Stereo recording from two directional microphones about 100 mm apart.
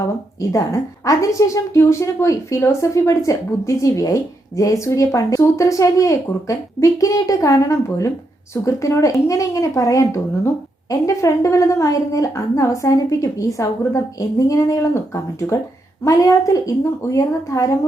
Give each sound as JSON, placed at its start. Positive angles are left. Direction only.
{"t": 0.3, "sound": "a woman's voice", "side_deg": 35}